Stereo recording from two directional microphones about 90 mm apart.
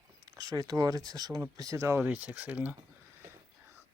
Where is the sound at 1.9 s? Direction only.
20° right (ahead or behind).